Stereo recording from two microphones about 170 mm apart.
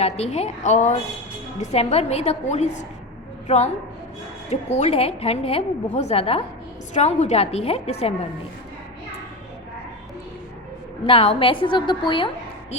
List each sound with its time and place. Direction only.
0.0 s a woman's voice: 40° left (ahead or behind)
11.0 s a woman's voice: 35° left (ahead or behind)